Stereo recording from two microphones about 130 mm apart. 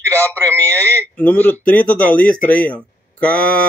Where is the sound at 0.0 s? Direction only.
20° right (ahead or behind).